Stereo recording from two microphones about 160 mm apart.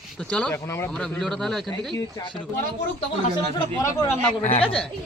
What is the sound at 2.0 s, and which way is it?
Speech, 20° left (ahead or behind).